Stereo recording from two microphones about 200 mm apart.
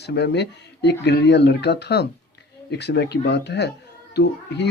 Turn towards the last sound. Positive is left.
turn(degrees=60)  # may be behind; listen again after turning